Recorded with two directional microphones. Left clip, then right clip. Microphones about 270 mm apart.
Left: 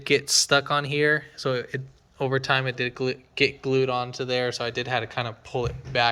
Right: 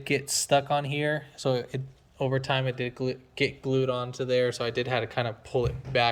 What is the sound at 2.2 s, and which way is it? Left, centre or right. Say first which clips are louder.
Speech: left 4 dB; left.